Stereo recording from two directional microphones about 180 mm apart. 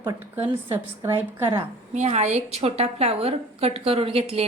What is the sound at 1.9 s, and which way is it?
A woman's voice, 40° right (ahead or behind).